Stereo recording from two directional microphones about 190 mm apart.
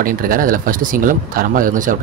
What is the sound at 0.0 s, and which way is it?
Speech, 50° right (ahead or behind).